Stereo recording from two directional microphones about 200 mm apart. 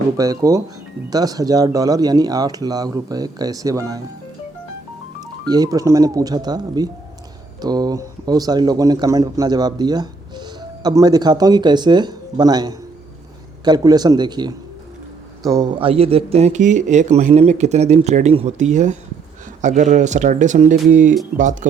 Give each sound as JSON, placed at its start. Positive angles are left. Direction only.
{"t": 0.2, "sound": "speech", "side_deg": -15}
{"t": 5.2, "sound": "speech", "side_deg": -20}